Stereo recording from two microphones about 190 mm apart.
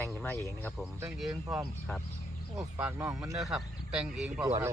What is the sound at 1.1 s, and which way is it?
Speech, 5° right (ahead or behind).